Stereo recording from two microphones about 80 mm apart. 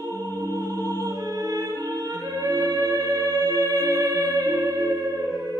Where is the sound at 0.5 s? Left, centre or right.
Right.